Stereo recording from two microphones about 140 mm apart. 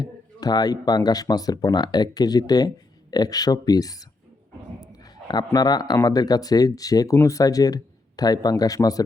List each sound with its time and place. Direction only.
0.0 s speech: 30° left (ahead or behind)
5.3 s speech: 30° left (ahead or behind)